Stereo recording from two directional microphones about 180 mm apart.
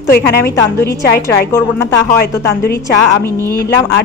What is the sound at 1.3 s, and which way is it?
Speech, 15° left (ahead or behind).